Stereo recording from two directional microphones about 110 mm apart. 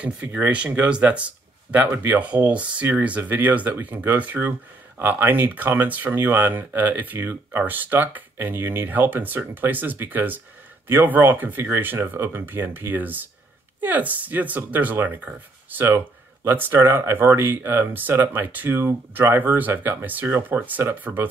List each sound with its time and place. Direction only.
0.0 s speech: 15° right (ahead or behind)